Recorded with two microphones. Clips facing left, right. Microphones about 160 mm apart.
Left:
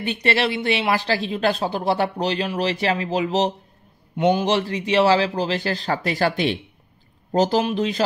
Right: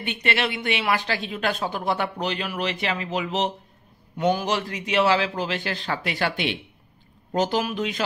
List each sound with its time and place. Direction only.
0.0 s speech: 35° left (ahead or behind)
4.2 s speech: 25° left (ahead or behind)